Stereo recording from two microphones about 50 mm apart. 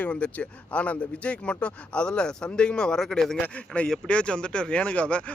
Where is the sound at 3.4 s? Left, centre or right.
Left.